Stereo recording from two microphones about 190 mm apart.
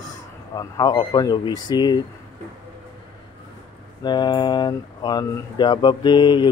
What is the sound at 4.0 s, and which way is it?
Speech, 25° left (ahead or behind).